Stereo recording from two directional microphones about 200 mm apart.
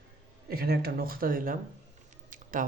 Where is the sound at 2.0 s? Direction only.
40° right (ahead or behind).